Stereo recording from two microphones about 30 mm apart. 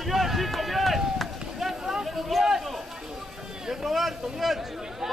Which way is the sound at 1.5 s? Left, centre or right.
Centre.